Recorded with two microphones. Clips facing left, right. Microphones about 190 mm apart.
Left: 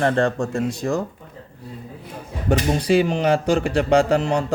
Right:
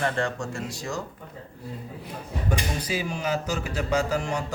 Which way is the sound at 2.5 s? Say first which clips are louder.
Left 11 dB; 70° left (ahead or behind).